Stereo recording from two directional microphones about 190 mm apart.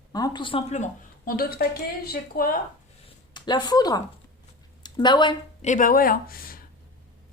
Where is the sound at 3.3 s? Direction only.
25° left (ahead or behind).